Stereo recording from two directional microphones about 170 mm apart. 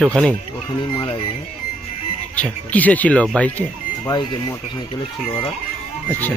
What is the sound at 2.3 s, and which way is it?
Speech, 10° left (ahead or behind).